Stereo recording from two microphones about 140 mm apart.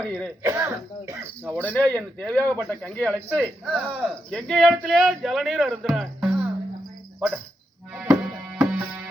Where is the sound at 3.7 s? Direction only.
10° right (ahead or behind).